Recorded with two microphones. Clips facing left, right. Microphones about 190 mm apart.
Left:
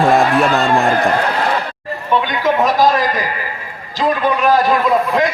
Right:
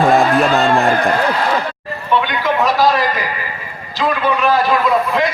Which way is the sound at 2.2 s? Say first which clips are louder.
Left 1 dB; 45° left (ahead or behind).